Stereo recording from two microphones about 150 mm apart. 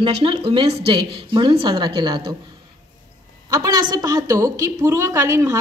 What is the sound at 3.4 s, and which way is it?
A woman's voice, 25° right (ahead or behind).